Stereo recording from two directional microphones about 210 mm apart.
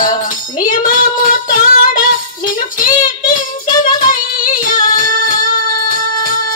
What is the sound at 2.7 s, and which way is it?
Speech, 40° left (ahead or behind).